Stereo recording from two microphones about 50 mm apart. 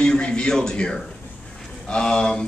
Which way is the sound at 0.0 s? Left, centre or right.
Centre.